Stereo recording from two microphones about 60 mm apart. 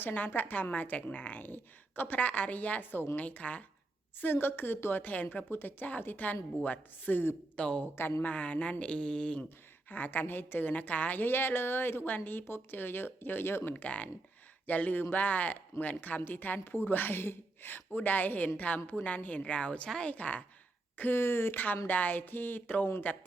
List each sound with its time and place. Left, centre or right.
0.0 s a woman's voice: left
4.2 s a woman's voice: left
7.5 s a woman's voice: left
9.9 s a woman's voice: left
13.7 s a woman's voice: left
21.0 s a woman's voice: left